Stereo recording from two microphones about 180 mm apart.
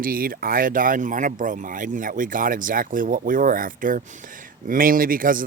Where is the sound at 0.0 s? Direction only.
55° right (ahead or behind).